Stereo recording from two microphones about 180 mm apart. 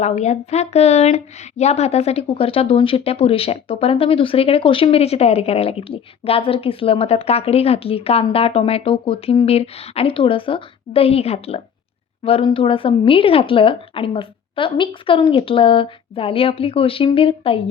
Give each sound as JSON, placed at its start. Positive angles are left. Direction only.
{"t": 0.0, "sound": "a woman's voice", "side_deg": 40}